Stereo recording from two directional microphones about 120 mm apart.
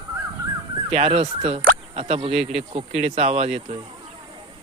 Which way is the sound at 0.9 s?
55° right (ahead or behind).